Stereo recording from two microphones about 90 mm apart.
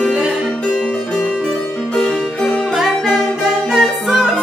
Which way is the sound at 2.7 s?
5° right (ahead or behind).